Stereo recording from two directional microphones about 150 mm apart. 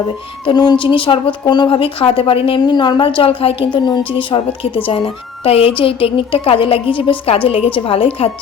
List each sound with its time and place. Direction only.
0.4 s a woman's voice: 30° left (ahead or behind)